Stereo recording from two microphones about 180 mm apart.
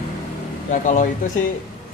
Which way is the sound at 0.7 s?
45° left (ahead or behind).